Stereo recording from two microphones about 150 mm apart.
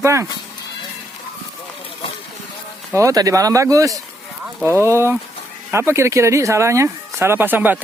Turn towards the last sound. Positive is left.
turn(degrees=-10)  # may be behind; listen again after turning